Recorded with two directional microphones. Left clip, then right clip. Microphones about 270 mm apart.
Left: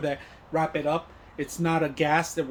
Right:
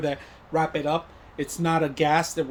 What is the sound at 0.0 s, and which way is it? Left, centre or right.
Speech, centre.